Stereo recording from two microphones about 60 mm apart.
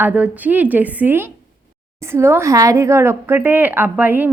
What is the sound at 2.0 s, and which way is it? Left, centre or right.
Speech, right.